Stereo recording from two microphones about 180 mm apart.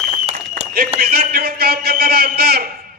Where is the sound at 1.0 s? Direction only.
60° right (ahead or behind).